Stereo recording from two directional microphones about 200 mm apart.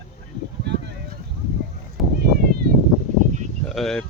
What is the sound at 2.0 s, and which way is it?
Cat, centre (ahead or behind).